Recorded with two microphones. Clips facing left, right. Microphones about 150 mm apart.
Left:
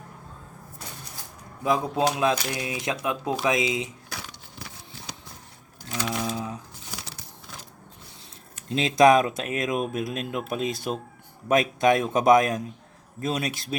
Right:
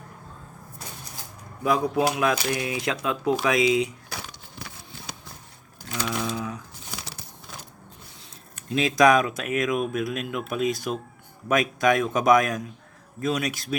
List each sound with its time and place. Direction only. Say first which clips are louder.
1.6 s speech: right 1 dB; 20° left (ahead or behind)
6.1 s a sound: even; 30° left (ahead or behind)
8.7 s speech: left 1 dB; 30° left (ahead or behind)